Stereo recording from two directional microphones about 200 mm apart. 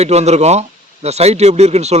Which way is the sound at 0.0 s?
35° right (ahead or behind).